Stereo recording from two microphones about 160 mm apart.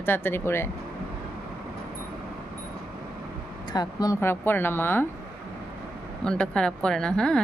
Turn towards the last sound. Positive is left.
turn(degrees=5)  # may be behind; listen again after turning